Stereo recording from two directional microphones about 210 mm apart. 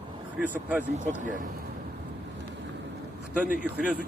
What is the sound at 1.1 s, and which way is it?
Speech, 40° right (ahead or behind).